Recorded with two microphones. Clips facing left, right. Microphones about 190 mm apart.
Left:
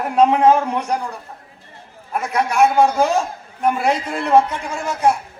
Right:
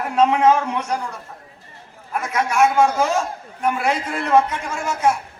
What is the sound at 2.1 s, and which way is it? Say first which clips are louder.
Speech: left 2 dB; 35° left (ahead or behind).